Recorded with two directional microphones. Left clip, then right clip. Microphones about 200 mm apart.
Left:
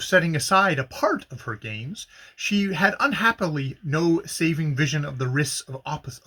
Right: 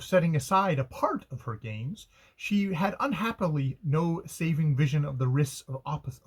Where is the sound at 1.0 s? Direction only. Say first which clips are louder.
Left 6 dB; 20° left (ahead or behind).